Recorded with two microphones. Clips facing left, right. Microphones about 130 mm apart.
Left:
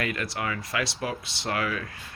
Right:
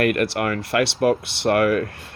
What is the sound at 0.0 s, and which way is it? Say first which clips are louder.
Speech: right 10 dB; 65° right (ahead or behind).